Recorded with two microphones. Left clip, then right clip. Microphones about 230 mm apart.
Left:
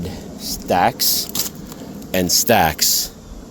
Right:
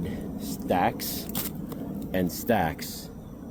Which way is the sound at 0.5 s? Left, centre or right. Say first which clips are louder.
Left 9 dB; left.